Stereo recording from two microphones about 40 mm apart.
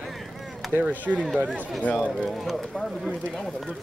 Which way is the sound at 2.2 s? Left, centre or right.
Centre.